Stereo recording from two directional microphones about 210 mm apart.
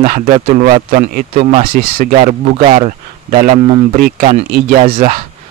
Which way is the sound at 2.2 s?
30° right (ahead or behind).